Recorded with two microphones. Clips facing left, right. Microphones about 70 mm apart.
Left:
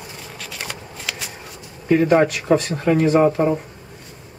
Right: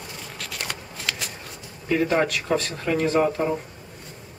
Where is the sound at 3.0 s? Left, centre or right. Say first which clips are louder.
Left 5 dB; centre.